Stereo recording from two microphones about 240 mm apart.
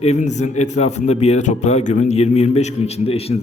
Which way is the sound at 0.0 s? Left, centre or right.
Left.